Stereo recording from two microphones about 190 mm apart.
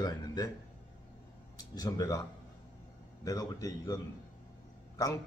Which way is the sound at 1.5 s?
20° left (ahead or behind).